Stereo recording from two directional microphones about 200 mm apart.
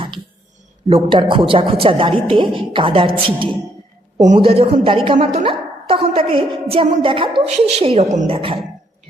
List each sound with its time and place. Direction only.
1.1 s a woman's voice: 25° right (ahead or behind)